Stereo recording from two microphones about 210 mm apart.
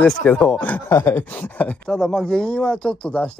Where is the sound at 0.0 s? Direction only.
5° left (ahead or behind).